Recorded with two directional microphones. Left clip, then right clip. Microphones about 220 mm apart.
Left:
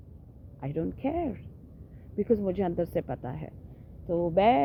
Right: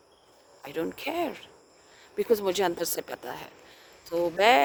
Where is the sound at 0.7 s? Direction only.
25° right (ahead or behind).